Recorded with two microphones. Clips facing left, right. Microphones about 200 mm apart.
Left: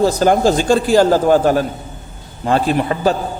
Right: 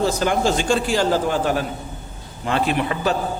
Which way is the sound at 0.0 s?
40° left (ahead or behind).